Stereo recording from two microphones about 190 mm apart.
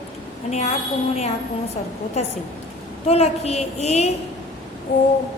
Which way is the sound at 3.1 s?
35° left (ahead or behind).